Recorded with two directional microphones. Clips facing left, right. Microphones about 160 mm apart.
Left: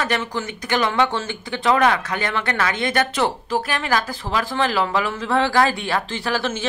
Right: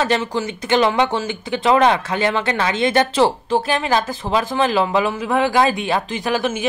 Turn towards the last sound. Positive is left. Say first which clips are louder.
# right 3 dB
turn(degrees=-15)  # may be behind; listen again after turning